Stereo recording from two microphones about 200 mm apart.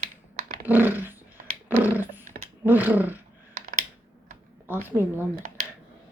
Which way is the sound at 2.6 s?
10° right (ahead or behind).